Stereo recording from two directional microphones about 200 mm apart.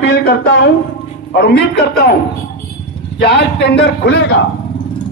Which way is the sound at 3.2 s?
55° left (ahead or behind).